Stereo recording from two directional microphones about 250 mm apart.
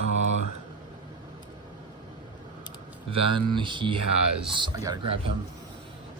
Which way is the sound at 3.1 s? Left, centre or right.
Centre.